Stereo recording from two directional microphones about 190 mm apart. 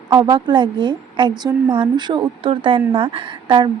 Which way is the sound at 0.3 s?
25° right (ahead or behind).